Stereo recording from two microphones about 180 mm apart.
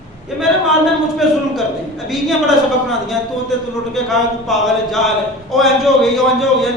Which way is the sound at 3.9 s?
Centre (ahead or behind).